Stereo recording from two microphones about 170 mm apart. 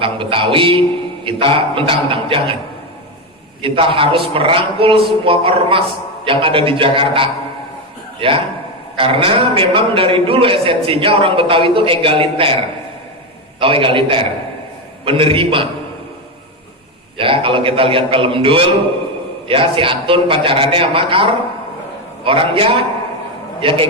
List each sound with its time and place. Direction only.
0.0 s a man's voice: 30° right (ahead or behind)
3.6 s a man's voice: 30° right (ahead or behind)
13.6 s a man's voice: 30° right (ahead or behind)
17.2 s a man's voice: 30° right (ahead or behind)